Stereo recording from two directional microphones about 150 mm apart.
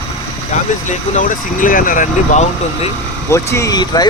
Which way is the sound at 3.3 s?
20° left (ahead or behind).